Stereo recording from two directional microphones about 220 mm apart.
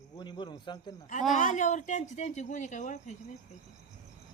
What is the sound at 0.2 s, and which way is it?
Speech, 20° left (ahead or behind).